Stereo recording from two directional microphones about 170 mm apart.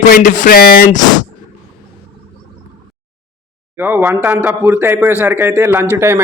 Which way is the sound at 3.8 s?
15° right (ahead or behind).